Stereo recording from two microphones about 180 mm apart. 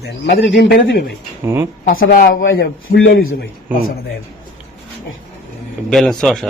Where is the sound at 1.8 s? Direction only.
55° left (ahead or behind).